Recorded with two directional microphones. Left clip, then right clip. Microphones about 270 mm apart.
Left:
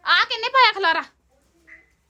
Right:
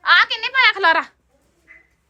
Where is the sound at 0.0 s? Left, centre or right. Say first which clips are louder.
Right 4 dB; centre.